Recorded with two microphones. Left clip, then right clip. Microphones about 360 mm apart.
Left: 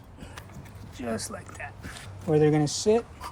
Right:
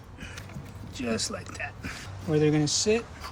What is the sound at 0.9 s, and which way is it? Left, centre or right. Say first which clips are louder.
Speech: right 2 dB; centre.